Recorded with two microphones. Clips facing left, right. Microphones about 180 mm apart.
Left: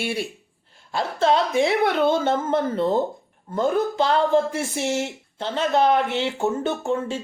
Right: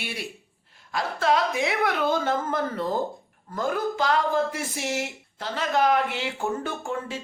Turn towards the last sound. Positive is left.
turn(degrees=25)  # may be behind; listen again after turning